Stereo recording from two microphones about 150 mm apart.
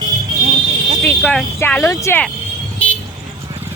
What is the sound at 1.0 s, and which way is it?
Speech, 10° left (ahead or behind).